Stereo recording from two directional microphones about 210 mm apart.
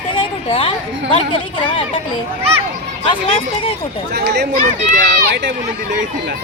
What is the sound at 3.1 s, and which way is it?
Speech, 25° left (ahead or behind).